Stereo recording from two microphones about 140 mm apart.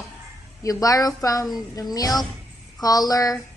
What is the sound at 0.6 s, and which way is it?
A woman's voice, 25° left (ahead or behind).